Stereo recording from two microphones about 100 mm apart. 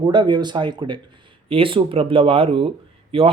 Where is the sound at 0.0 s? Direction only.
50° right (ahead or behind).